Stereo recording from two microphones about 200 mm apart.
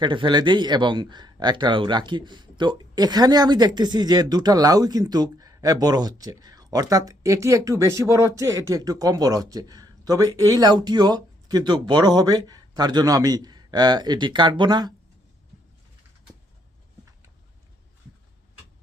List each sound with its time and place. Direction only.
0.0 s speech: 25° right (ahead or behind)